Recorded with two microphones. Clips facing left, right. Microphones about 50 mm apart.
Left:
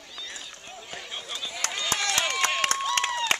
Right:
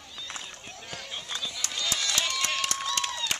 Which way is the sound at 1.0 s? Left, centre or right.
Centre.